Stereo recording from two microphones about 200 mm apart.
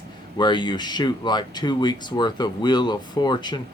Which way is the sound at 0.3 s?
20° left (ahead or behind).